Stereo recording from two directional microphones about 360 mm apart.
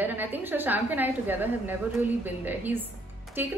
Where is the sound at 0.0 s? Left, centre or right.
Centre.